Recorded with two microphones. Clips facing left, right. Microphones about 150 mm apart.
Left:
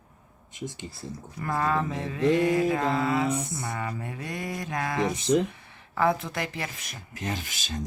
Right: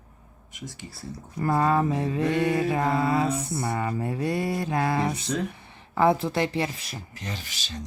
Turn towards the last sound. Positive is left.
turn(degrees=45)  # may be behind; listen again after turning